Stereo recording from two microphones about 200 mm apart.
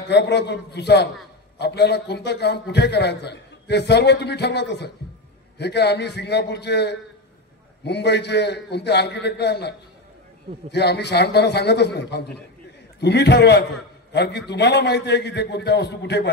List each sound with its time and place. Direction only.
0.1 s a man's voice: 60° left (ahead or behind)